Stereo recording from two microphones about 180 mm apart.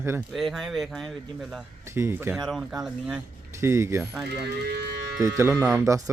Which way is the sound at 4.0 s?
Centre (ahead or behind).